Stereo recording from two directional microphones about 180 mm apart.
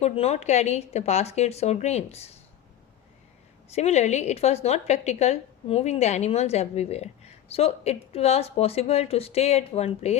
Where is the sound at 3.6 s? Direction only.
35° left (ahead or behind).